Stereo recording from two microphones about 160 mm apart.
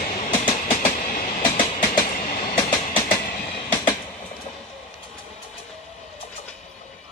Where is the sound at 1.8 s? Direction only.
50° left (ahead or behind).